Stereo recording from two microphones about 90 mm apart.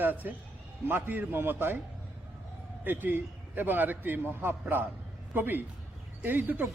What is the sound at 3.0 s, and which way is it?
A man's voice, 20° right (ahead or behind).